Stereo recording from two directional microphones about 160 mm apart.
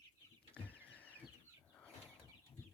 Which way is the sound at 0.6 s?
10° left (ahead or behind).